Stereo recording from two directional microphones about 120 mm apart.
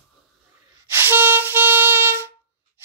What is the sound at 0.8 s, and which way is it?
Music, 20° right (ahead or behind).